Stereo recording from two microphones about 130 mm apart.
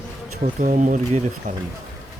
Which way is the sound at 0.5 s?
75° right (ahead or behind).